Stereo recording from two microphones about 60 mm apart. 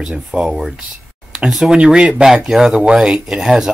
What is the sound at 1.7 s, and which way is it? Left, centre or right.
Speech, centre.